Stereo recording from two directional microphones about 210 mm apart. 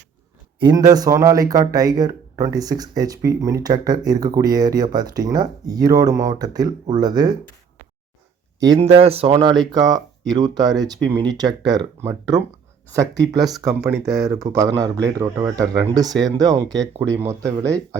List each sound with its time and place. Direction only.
0.6 s speech: 20° right (ahead or behind)
8.6 s speech: 20° right (ahead or behind)